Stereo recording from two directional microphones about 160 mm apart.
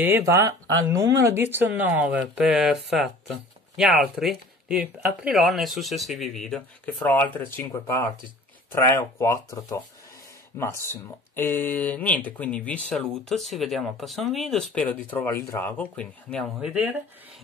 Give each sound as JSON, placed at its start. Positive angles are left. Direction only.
{"t": 0.0, "sound": "speech", "side_deg": -15}